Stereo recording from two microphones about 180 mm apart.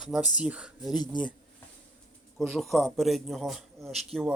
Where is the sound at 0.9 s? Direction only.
25° left (ahead or behind).